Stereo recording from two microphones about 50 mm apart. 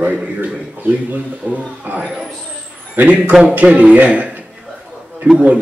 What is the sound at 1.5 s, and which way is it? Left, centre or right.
Speech, right.